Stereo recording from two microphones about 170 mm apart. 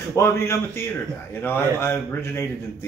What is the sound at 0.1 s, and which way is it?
Speech, 15° left (ahead or behind).